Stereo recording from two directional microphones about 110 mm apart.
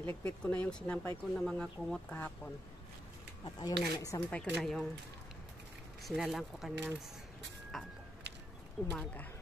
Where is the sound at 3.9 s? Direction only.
30° left (ahead or behind).